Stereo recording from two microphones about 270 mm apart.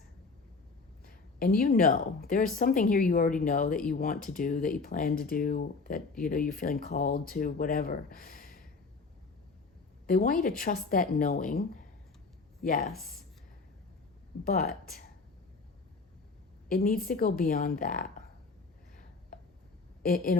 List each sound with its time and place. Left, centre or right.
1.0 s speech: left
10.1 s speech: left
14.4 s speech: left
16.6 s speech: left
20.0 s a woman's voice: left